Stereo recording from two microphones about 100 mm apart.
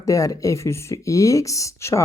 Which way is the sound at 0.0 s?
35° left (ahead or behind).